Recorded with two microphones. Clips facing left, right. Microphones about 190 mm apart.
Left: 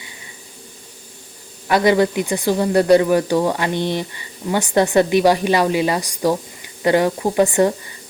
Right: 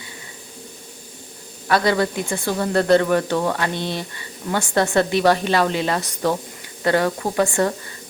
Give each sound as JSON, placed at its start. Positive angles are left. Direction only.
{"t": 1.6, "sound": "speech", "side_deg": 15}